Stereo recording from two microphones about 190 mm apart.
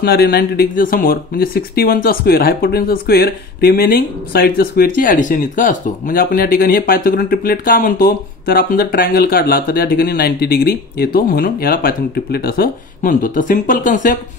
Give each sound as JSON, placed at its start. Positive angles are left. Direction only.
{"t": 0.0, "sound": "speech", "side_deg": 55}